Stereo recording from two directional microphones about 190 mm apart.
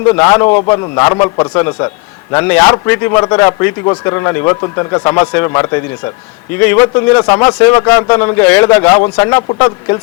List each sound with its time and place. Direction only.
0.1 s a man's voice: 20° left (ahead or behind)